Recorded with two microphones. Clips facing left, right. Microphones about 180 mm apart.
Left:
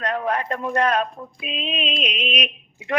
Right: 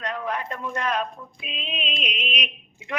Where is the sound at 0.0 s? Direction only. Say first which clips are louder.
Left 5 dB; 65° left (ahead or behind).